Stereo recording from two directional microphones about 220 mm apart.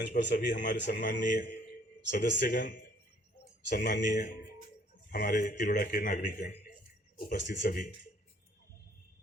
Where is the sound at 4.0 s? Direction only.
35° left (ahead or behind).